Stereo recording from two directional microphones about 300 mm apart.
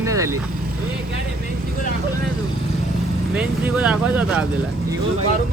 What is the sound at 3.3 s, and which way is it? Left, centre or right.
Speech, centre.